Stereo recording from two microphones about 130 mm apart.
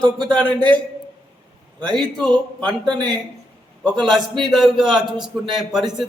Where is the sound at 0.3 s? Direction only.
10° left (ahead or behind).